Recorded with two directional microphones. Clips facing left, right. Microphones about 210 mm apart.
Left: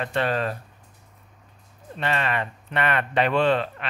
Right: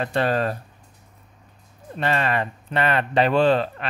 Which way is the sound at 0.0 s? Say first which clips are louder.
Right 3 dB; 35° right (ahead or behind).